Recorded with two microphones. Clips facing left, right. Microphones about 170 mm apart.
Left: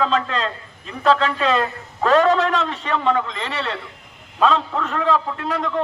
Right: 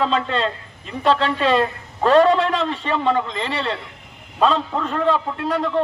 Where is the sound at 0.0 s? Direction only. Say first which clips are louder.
Even; 30° right (ahead or behind).